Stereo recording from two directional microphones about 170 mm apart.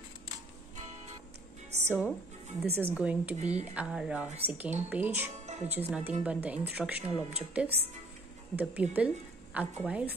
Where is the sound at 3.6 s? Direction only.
10° right (ahead or behind).